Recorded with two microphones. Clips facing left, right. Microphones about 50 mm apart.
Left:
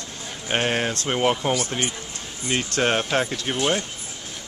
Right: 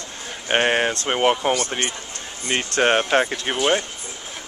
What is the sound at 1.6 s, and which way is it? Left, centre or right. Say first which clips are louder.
Speech: right 1 dB; right.